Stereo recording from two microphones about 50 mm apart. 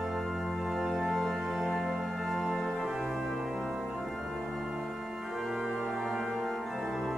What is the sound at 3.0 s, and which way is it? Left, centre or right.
Organ, centre.